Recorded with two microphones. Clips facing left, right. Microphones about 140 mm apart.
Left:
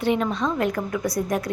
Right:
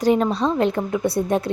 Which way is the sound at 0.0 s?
35° right (ahead or behind).